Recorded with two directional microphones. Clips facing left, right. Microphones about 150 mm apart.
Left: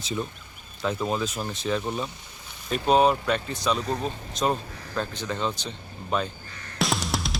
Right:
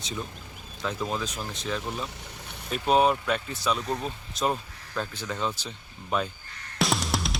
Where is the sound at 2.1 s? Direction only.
70° right (ahead or behind).